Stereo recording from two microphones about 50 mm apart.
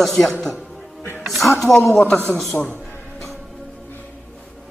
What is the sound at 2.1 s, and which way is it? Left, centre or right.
Speech, left.